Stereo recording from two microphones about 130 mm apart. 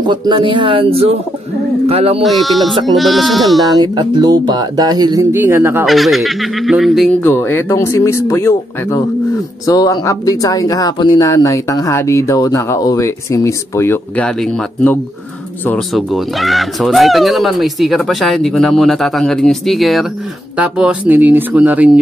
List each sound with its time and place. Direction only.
0.0 s speech: 40° right (ahead or behind)
2.2 s speech: centre (ahead or behind)
3.7 s speech: 35° right (ahead or behind)
5.3 s speech: 15° right (ahead or behind)
5.9 s speech: centre (ahead or behind)
7.1 s speech: 15° left (ahead or behind); by 22.0 s 10° right (ahead or behind)